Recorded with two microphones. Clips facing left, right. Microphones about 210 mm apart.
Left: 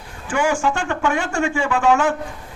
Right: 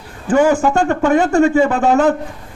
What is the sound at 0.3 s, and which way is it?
A man's voice, 40° right (ahead or behind).